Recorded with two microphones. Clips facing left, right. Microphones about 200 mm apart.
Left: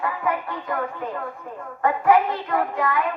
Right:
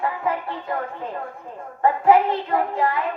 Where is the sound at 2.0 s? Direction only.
30° right (ahead or behind).